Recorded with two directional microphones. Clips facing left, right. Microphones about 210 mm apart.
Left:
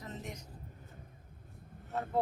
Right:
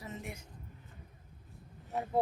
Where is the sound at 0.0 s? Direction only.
10° right (ahead or behind).